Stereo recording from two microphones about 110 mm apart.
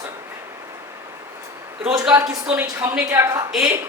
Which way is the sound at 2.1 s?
25° right (ahead or behind).